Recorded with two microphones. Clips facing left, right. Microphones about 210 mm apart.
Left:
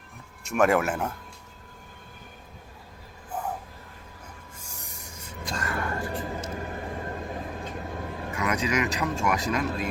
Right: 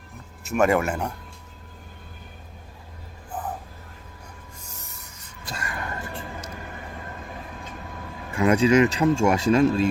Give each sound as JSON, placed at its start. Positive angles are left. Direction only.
{"t": 0.4, "sound": "speech", "side_deg": 0}
{"t": 4.6, "sound": "train", "side_deg": 10}
{"t": 5.5, "sound": "a sound", "side_deg": -10}
{"t": 8.4, "sound": "speech", "side_deg": -30}